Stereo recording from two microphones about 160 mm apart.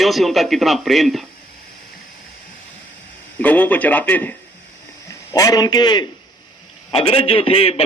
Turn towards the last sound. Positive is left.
turn(degrees=40)  # may be behind; listen again after turning